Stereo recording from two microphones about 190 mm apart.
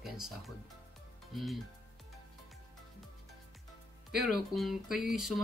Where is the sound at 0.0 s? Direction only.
Centre (ahead or behind).